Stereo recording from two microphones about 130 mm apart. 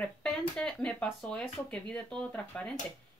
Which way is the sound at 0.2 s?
5° left (ahead or behind).